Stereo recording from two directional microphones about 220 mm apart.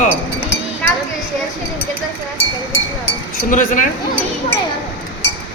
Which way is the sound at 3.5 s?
35° left (ahead or behind).